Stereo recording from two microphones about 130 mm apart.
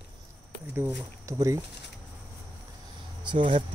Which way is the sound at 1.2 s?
20° right (ahead or behind).